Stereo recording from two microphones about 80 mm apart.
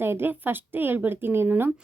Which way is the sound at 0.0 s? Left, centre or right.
Right.